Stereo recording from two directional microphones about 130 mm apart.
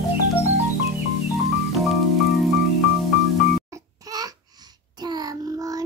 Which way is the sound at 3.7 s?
30° right (ahead or behind).